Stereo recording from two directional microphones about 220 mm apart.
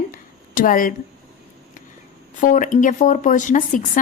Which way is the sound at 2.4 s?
35° left (ahead or behind).